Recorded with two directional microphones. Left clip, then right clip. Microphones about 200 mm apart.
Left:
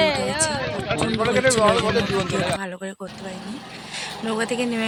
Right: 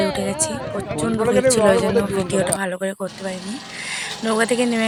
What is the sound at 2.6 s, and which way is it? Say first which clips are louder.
Speech: right 7 dB; 15° right (ahead or behind).